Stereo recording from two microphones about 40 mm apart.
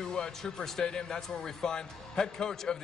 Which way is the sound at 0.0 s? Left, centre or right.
Centre.